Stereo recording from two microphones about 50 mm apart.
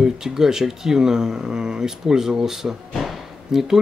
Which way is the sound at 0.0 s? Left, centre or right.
Centre.